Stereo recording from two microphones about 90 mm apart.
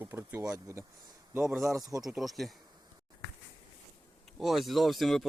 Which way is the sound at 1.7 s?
40° right (ahead or behind).